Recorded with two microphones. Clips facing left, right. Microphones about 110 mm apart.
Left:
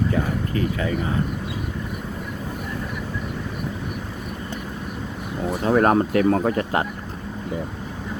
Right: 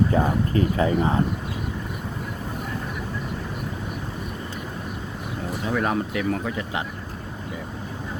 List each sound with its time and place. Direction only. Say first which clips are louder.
0.1 s speech: right 2 dB; 30° right (ahead or behind)
5.6 s speech: left 7 dB; 45° left (ahead or behind)